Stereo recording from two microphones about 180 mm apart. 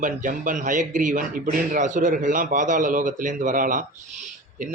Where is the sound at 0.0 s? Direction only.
50° right (ahead or behind).